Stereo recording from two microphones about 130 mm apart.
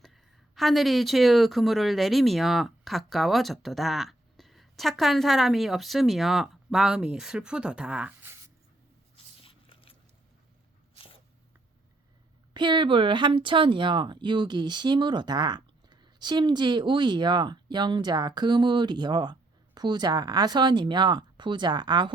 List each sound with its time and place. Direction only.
0.0 s speech: centre (ahead or behind)
9.1 s biting: 45° left (ahead or behind)
12.5 s speech: 35° right (ahead or behind)